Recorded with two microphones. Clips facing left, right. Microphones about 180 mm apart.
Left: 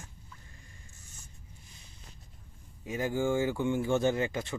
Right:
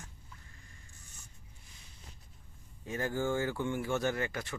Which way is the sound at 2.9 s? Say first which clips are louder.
Left 3 dB; 15° left (ahead or behind).